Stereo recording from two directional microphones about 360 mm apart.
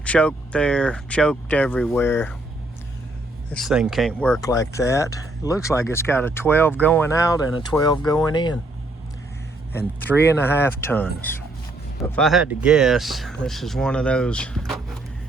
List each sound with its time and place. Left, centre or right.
0.0 s speech: centre
3.5 s speech: centre
10.1 s speech: centre